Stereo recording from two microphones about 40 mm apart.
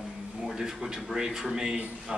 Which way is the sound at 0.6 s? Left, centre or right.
Centre.